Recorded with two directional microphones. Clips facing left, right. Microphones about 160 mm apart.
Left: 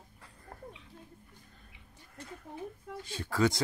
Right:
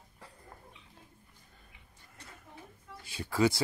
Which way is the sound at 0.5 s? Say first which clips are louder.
Left 7 dB; 50° left (ahead or behind).